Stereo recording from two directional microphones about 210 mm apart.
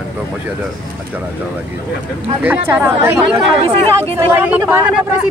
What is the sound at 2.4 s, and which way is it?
Speech, 10° right (ahead or behind).